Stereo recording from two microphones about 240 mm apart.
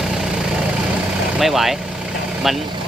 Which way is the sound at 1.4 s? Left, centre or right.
Centre.